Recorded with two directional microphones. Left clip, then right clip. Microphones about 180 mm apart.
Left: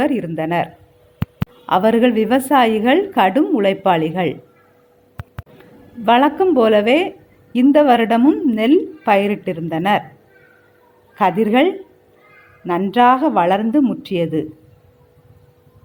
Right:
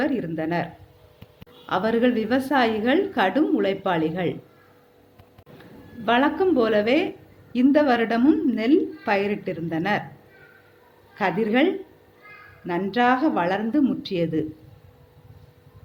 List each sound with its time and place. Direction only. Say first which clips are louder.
0.0 s a woman's voice: left 6 dB; 40° left (ahead or behind)
6.1 s a woman's voice: left 7 dB; 35° left (ahead or behind)
11.1 s a woman's voice: left 7 dB; 40° left (ahead or behind)